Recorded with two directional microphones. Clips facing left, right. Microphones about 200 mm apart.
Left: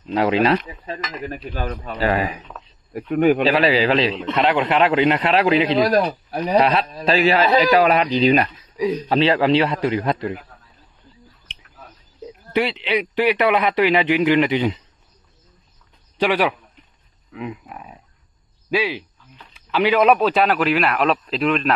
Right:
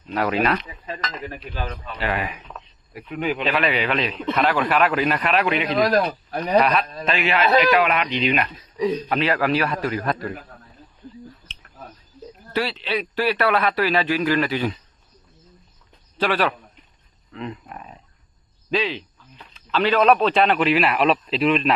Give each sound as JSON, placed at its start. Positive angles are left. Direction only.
{"t": 0.1, "sound": "speech", "side_deg": 25}
{"t": 1.4, "sound": "a man's voice", "side_deg": 45}
{"t": 2.9, "sound": "speech", "side_deg": 50}
{"t": 3.4, "sound": "speech", "side_deg": 30}
{"t": 5.8, "sound": "a man's voice", "side_deg": 10}
{"t": 6.6, "sound": "a man's voice", "side_deg": 25}
{"t": 12.3, "sound": "speech", "side_deg": 20}
{"t": 16.2, "sound": "a man's voice", "side_deg": 15}